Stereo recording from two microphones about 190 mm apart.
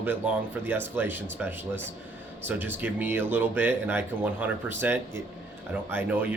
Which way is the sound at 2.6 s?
10° right (ahead or behind).